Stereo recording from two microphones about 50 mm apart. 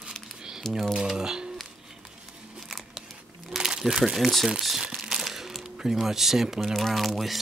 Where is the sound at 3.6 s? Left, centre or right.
Centre.